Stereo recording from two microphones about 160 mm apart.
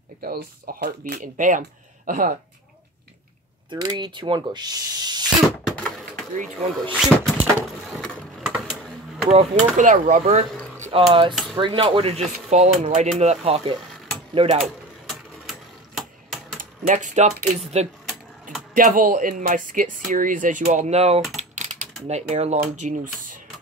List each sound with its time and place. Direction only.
0.2 s speech: 70° right (ahead or behind)
3.7 s speech: 25° right (ahead or behind)
5.8 s chop: 5° left (ahead or behind)
6.3 s speech: 50° right (ahead or behind)
7.0 s a sound: centre (ahead or behind)
9.3 s speech: 45° right (ahead or behind)
10.8 s speech: 35° right (ahead or behind)
12.4 s speech: 45° right (ahead or behind)
14.6 s sewing machine: centre (ahead or behind)
16.8 s speech: 50° right (ahead or behind)
18.7 s speech: 55° right (ahead or behind); by 21.2 s 40° right (ahead or behind)
21.4 s a sound: 50° right (ahead or behind)
22.8 s speech: 50° right (ahead or behind)